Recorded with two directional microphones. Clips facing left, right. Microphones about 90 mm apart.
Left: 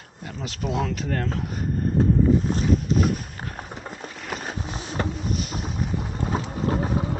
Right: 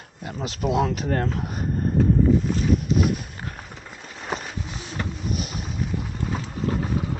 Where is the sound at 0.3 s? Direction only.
20° right (ahead or behind).